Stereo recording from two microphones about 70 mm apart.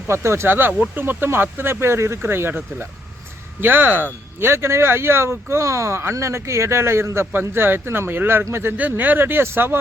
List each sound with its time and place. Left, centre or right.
0.1 s speech: right